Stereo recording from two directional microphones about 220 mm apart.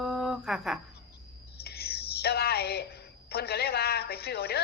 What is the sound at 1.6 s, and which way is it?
A woman's voice, 45° left (ahead or behind).